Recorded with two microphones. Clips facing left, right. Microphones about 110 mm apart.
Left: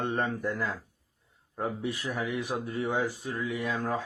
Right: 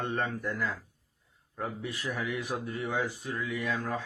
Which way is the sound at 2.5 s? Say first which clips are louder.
Left 2 dB; 20° left (ahead or behind).